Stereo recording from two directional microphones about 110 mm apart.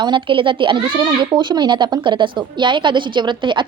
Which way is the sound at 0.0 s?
50° right (ahead or behind).